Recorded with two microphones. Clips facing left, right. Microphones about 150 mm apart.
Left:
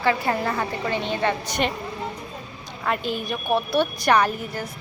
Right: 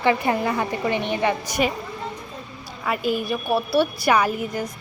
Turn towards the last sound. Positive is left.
turn(degrees=-10)  # may be behind; listen again after turning